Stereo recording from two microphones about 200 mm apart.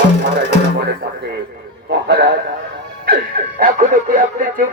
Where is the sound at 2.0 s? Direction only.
55° right (ahead or behind).